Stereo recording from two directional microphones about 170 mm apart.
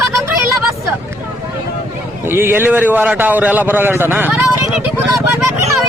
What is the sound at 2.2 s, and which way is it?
A man's voice, 15° right (ahead or behind).